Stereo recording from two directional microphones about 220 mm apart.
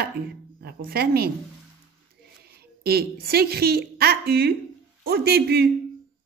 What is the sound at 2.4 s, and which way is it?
A woman's voice, 45° right (ahead or behind).